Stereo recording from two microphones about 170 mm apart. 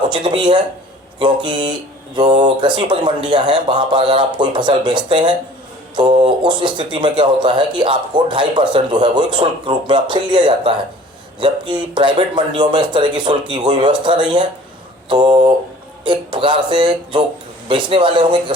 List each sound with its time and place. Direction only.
0.1 s speech: 25° right (ahead or behind)